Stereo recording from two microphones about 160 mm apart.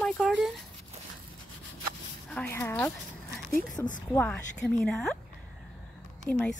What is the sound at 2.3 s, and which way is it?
A woman's voice, 10° left (ahead or behind).